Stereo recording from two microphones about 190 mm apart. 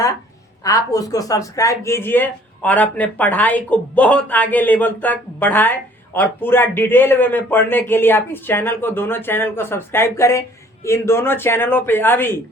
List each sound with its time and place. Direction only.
0.6 s speech: 20° left (ahead or behind)